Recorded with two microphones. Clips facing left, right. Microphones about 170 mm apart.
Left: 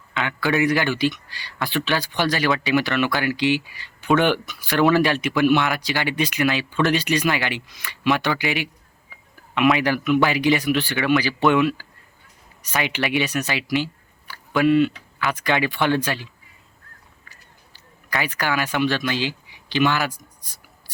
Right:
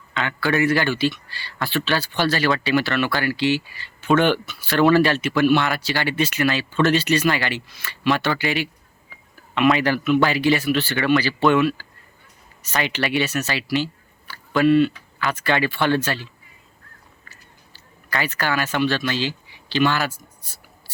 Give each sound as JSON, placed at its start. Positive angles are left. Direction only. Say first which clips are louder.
{"t": 0.1, "sound": "speech", "louder": "even", "side_deg": 10}
{"t": 9.8, "sound": "speech", "louder": "right 1 dB", "side_deg": 10}
{"t": 10.9, "sound": "speech", "louder": "right 1 dB", "side_deg": 0}
{"t": 11.2, "sound": "speech", "louder": "right 1 dB", "side_deg": 15}
{"t": 17.7, "sound": "speech", "louder": "even", "side_deg": 15}